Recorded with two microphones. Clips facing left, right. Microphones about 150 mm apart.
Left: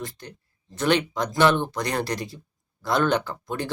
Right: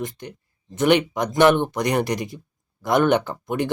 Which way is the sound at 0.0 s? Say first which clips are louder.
Right 5 dB; 20° right (ahead or behind).